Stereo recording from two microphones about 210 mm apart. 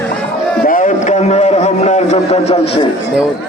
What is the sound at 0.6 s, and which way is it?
A man's voice, 40° left (ahead or behind).